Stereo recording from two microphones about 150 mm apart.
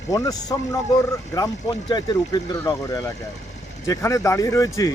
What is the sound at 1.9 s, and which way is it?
Speech, 25° left (ahead or behind).